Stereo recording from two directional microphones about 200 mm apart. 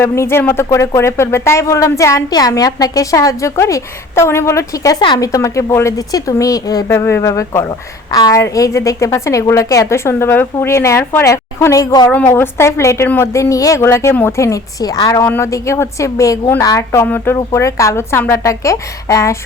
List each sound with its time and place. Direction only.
0.0 s speech: 10° left (ahead or behind)